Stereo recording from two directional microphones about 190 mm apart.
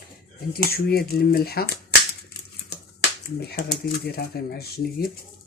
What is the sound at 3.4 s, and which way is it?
Speech, 55° left (ahead or behind).